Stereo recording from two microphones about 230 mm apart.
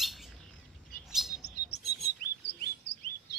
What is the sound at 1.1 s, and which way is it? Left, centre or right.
Chirp, centre.